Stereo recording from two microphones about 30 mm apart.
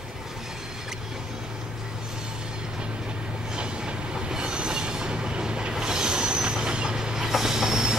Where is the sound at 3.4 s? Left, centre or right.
Right.